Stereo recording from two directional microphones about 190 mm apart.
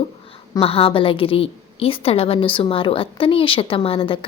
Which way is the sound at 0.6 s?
30° left (ahead or behind).